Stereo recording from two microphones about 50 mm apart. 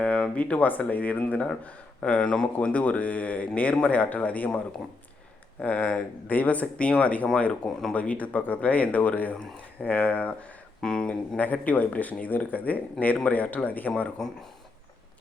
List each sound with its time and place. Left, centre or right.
0.0 s speech: left
10.8 s speech: centre
11.3 s speech: left